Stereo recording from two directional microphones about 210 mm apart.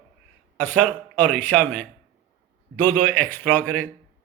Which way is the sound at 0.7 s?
5° left (ahead or behind).